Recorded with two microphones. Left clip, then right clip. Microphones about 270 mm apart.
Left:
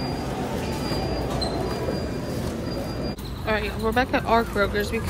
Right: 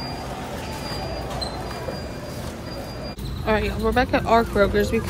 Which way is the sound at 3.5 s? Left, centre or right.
Centre.